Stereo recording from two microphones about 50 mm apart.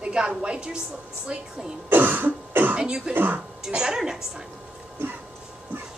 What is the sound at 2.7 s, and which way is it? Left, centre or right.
A woman's voice, right.